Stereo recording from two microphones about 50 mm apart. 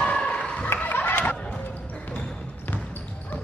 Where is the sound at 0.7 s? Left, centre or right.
Left.